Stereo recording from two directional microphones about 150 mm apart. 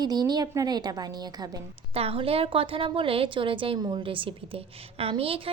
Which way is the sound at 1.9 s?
40° right (ahead or behind).